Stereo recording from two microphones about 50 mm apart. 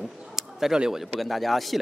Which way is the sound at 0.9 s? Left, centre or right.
Centre.